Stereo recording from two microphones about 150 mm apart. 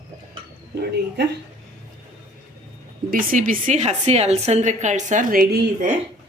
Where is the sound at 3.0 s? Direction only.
70° right (ahead or behind).